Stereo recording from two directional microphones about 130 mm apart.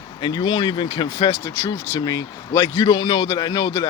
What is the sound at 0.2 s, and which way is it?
A man's voice, 30° left (ahead or behind).